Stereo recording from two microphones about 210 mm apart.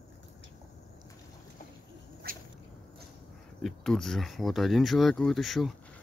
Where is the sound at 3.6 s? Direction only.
Centre (ahead or behind).